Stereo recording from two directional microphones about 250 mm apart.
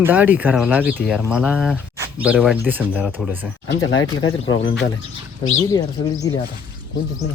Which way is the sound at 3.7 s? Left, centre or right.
Left.